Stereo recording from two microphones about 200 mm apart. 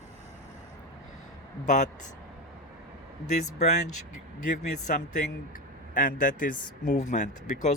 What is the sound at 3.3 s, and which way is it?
Speech, 35° left (ahead or behind).